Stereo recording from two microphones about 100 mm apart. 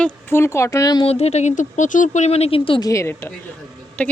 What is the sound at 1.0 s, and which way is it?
Speech, 90° left.